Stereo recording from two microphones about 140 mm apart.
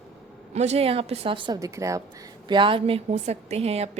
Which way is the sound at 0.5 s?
55° right (ahead or behind).